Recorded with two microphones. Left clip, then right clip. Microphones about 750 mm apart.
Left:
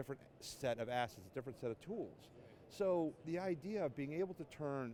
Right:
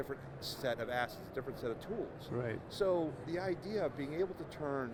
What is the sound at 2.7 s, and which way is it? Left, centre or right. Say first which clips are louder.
Speech: right 3 dB; left.